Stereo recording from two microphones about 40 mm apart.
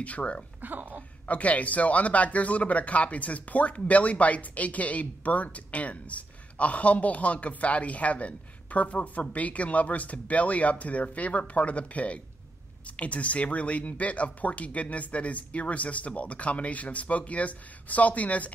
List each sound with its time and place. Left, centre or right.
0.0 s speech: left
0.6 s music: right
1.2 s speech: left